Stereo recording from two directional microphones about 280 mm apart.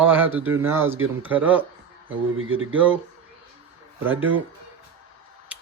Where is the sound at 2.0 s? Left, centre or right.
Right.